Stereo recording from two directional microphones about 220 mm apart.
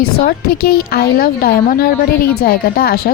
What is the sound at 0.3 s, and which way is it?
Speech, 45° left (ahead or behind).